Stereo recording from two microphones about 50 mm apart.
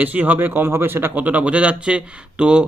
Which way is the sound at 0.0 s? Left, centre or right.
Right.